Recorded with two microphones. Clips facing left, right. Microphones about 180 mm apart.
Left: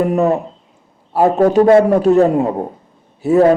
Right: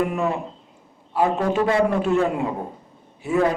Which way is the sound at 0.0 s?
40° left (ahead or behind).